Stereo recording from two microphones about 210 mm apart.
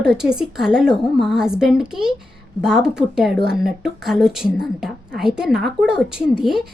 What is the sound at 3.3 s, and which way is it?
Speech, 55° right (ahead or behind).